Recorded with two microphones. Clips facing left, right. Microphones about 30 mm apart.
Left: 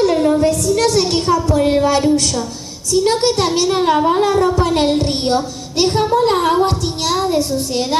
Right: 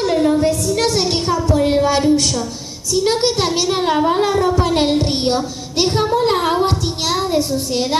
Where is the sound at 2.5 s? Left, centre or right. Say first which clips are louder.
Left 3 dB; centre.